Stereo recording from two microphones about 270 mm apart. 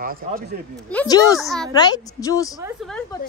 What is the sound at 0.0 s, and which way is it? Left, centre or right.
Speech, right.